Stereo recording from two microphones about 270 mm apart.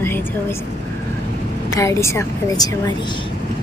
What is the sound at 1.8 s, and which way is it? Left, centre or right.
A woman's voice, centre.